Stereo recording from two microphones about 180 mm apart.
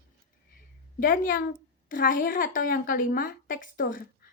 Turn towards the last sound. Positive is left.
turn(degrees=50)  # may be behind; listen again after turning